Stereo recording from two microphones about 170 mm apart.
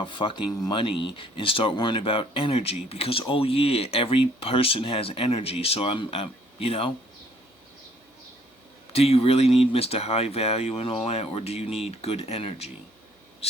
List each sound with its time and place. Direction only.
0.0 s speech: 30° left (ahead or behind)
8.9 s speech: 35° left (ahead or behind)